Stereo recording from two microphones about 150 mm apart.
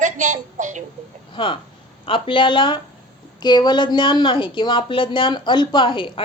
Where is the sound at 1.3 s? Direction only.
35° left (ahead or behind).